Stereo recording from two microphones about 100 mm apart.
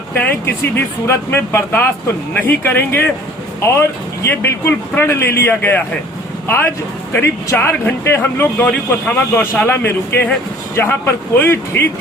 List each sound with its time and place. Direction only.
0.2 s speech: 20° left (ahead or behind)